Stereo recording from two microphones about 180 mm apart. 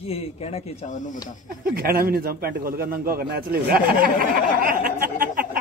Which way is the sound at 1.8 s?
55° right (ahead or behind).